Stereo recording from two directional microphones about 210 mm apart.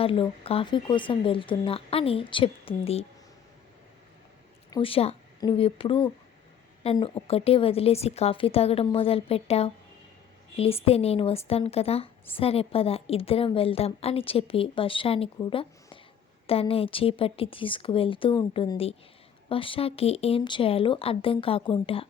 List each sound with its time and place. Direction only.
0.0 s a woman's voice: 25° left (ahead or behind)
4.7 s a woman's voice: 25° left (ahead or behind)